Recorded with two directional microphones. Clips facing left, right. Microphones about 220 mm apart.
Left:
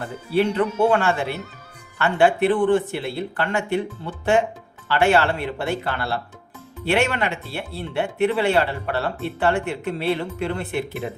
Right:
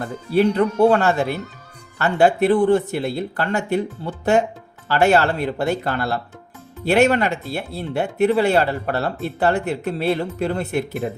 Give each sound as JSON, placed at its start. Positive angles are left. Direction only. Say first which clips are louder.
{"t": 0.3, "sound": "speech", "louder": "right 3 dB", "side_deg": -40}